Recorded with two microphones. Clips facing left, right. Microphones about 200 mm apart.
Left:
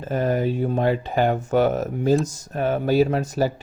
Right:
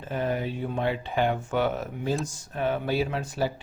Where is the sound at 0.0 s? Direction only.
40° left (ahead or behind).